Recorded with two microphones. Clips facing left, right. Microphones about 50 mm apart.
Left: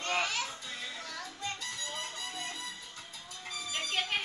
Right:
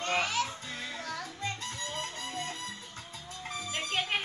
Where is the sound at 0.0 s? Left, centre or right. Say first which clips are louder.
Right 2 dB; right.